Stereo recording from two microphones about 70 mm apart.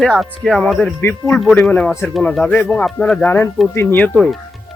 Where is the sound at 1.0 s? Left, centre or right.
Left.